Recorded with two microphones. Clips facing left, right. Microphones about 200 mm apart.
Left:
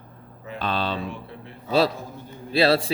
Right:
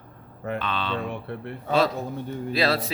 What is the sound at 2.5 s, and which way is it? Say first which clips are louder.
Speech: left 5 dB; 30° left (ahead or behind).